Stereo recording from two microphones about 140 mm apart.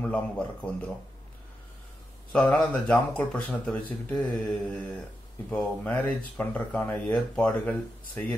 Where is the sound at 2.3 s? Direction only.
10° left (ahead or behind).